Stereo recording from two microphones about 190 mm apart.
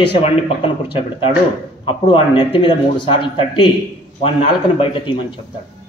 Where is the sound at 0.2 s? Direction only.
30° left (ahead or behind).